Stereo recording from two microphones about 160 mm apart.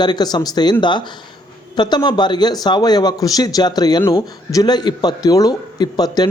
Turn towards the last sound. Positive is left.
turn(degrees=25)  # may be behind; listen again after turning